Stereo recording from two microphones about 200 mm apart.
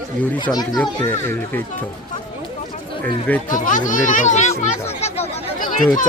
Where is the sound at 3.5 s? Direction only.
40° left (ahead or behind).